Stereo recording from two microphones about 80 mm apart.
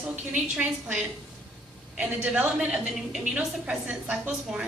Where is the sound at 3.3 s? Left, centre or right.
Centre.